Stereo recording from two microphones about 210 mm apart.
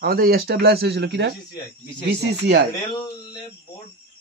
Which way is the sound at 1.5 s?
20° left (ahead or behind).